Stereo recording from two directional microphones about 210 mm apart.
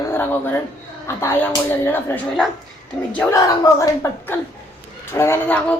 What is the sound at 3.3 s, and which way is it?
Speech, 15° left (ahead or behind).